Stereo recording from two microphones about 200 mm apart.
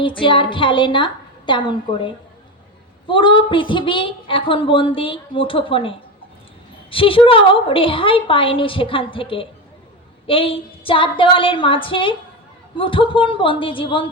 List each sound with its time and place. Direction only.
0.0 s a woman's voice: 25° left (ahead or behind)